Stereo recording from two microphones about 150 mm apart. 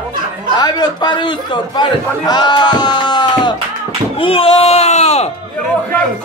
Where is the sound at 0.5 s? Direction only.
30° left (ahead or behind); by 5.3 s 45° left (ahead or behind).